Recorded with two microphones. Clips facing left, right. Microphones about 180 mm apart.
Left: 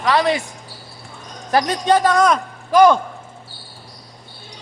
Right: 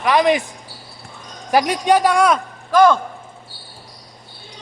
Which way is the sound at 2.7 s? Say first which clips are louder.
Left 1 dB; 10° left (ahead or behind).